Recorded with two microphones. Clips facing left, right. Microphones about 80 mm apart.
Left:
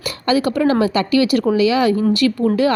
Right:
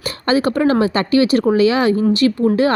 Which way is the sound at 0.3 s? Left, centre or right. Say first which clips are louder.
Right 1 dB; right.